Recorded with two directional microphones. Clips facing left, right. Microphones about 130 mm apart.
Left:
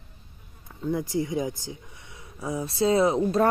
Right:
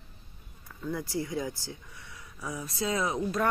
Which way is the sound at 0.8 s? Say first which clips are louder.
Left 6 dB; 20° left (ahead or behind).